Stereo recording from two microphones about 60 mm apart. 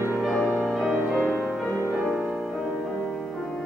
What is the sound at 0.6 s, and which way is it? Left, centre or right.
Music, centre.